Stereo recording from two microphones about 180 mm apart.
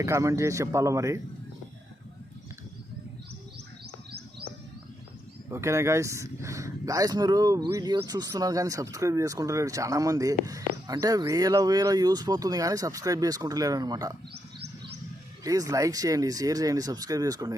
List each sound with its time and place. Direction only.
0.0 s a man's voice: 15° right (ahead or behind)
4.1 s bird: 65° right (ahead or behind)
5.5 s speech: 15° right (ahead or behind)
14.3 s a sound: 65° right (ahead or behind)
15.4 s speech: 20° right (ahead or behind)